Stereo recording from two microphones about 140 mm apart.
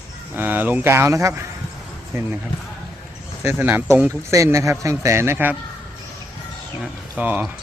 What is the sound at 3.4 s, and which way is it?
Speech, 15° right (ahead or behind).